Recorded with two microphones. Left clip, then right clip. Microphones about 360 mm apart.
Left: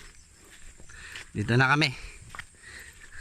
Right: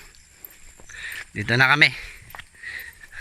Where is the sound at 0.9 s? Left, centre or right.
Centre.